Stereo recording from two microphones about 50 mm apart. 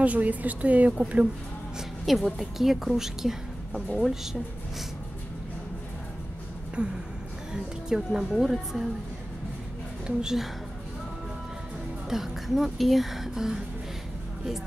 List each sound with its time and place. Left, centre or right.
0.0 s speech: right
2.3 s a woman's voice: centre
6.8 s a woman's voice: right; by 8.8 s centre
10.0 s speech: centre
12.1 s a woman's voice: centre